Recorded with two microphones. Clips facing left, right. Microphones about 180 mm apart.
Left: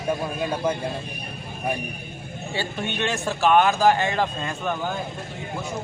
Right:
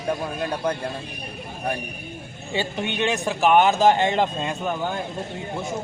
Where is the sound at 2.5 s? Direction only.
15° right (ahead or behind).